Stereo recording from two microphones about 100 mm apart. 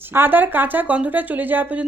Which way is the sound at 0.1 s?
20° right (ahead or behind).